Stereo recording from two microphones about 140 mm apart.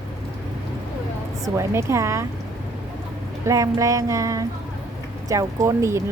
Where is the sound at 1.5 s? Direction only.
20° right (ahead or behind).